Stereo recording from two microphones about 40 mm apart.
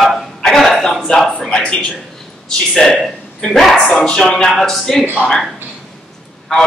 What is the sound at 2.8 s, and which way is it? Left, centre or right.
Speech, centre.